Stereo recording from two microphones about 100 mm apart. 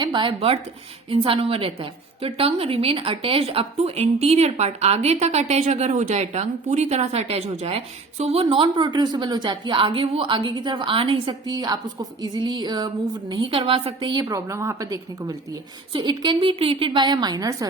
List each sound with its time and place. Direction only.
0.0 s speech: 55° right (ahead or behind); by 0.6 s 75° right (ahead or behind)
1.1 s a woman's voice: 60° right (ahead or behind)
11.4 s a woman's voice: 40° right (ahead or behind); by 13.9 s 70° right (ahead or behind)
14.0 s a woman's voice: 45° right (ahead or behind)
15.9 s a woman's voice: 50° right (ahead or behind)